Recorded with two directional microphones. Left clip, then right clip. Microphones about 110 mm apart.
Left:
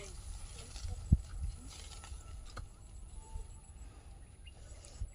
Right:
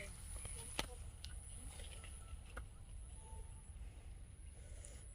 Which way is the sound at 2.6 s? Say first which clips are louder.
Left 3 dB; 45° right (ahead or behind).